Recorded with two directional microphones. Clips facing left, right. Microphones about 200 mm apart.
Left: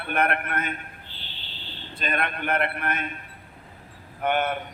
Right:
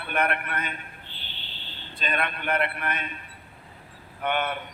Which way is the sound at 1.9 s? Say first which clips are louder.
Left 1 dB; 50° left (ahead or behind).